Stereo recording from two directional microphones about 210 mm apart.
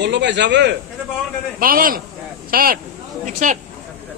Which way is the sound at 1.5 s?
45° right (ahead or behind).